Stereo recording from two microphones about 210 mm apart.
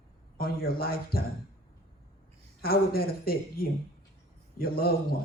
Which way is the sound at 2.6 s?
45° left (ahead or behind).